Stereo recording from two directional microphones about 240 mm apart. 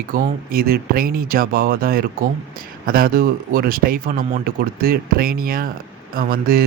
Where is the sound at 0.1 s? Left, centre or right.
Right.